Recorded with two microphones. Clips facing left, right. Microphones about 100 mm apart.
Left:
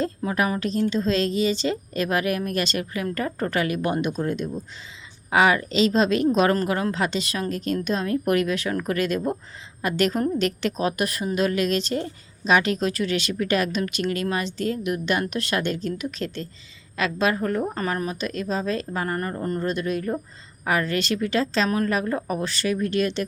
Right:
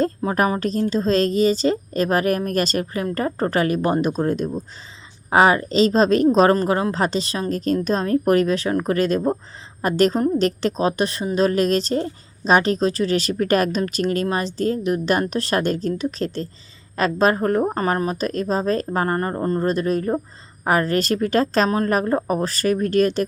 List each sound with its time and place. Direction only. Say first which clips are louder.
0.2 s a woman's voice: right 4 dB; 35° right (ahead or behind)